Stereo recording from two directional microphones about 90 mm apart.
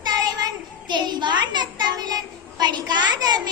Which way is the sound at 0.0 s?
55° right (ahead or behind).